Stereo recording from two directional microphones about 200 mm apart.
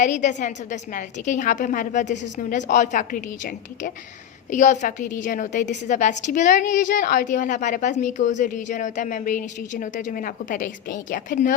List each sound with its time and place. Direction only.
0.0 s a woman's voice: 35° left (ahead or behind)